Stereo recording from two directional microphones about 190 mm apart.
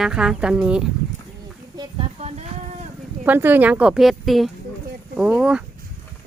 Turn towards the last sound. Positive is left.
turn(degrees=-5)  # may be behind; listen again after turning